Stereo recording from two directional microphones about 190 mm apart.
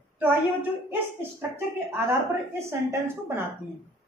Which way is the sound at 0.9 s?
10° right (ahead or behind).